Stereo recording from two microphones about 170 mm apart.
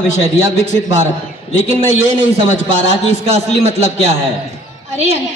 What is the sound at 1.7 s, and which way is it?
A man's voice, 35° right (ahead or behind).